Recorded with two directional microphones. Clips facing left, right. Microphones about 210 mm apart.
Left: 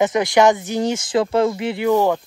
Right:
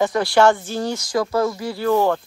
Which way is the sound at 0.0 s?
20° left (ahead or behind).